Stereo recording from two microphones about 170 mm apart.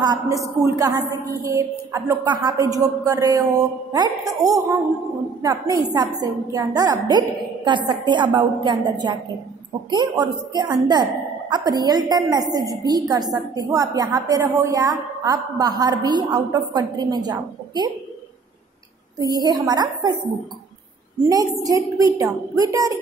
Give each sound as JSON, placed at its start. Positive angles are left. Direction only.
{"t": 0.0, "sound": "a woman's voice", "side_deg": -20}
{"t": 19.1, "sound": "a woman's voice", "side_deg": -25}
{"t": 21.6, "sound": "a woman's voice", "side_deg": -20}